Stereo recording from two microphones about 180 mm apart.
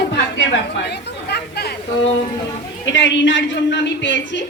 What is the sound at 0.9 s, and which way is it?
Chatter, 65° left (ahead or behind).